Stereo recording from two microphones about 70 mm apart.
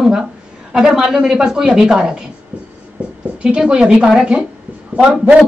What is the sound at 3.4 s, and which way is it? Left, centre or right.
A woman's voice, centre.